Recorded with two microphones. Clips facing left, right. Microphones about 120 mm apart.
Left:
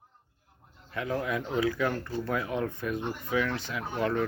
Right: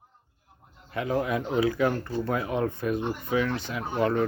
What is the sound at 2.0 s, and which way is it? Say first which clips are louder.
Speech: right 4 dB; 30° right (ahead or behind).